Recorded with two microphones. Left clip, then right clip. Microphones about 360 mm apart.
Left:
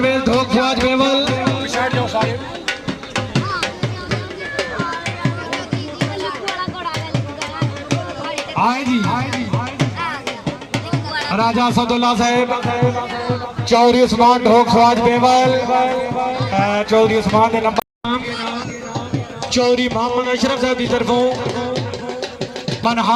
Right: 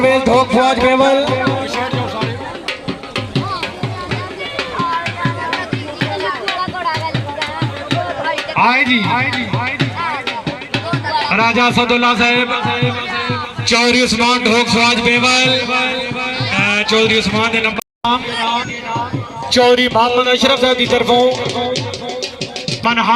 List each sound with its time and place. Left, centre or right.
0.0 s music: centre
1.5 s music: left
8.4 s speech: centre
11.3 s music: centre
13.7 s a man's voice: left
19.5 s a man's voice: right
21.3 s music: left
22.8 s speech: centre